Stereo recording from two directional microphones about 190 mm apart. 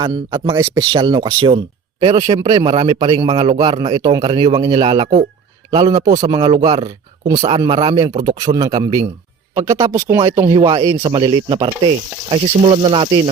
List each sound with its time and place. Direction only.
0.0 s speech: 25° right (ahead or behind)
6.1 s speech: 15° right (ahead or behind)
6.4 s speech: 30° right (ahead or behind)